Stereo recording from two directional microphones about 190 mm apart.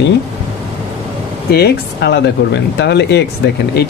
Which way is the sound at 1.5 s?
55° left (ahead or behind).